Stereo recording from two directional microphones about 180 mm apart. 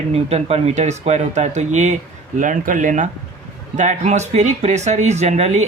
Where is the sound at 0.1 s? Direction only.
35° right (ahead or behind).